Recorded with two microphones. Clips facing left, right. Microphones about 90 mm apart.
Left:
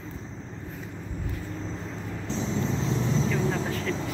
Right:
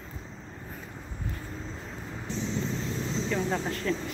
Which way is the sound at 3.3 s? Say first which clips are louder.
Left 2 dB; 5° right (ahead or behind).